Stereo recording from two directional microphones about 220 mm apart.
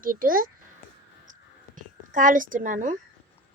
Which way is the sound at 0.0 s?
40° right (ahead or behind).